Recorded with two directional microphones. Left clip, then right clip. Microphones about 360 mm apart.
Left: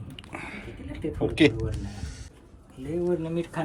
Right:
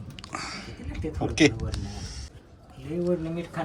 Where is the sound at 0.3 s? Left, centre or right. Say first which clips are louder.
Right 3 dB; centre.